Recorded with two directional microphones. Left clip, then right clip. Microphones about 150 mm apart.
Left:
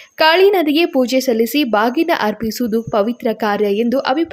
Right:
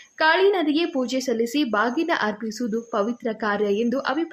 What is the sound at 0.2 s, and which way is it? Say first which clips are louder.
A woman's voice: left 7 dB; 45° left (ahead or behind).